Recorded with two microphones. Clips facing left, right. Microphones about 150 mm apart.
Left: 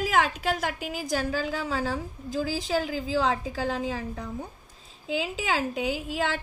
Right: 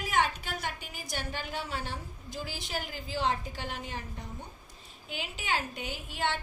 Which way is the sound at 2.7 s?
90° left.